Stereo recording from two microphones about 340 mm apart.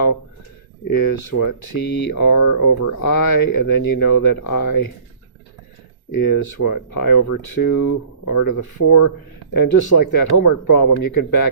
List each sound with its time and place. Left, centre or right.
1.4 s speech: left
3.2 s speech: left
6.1 s speech: left
9.5 s speech: left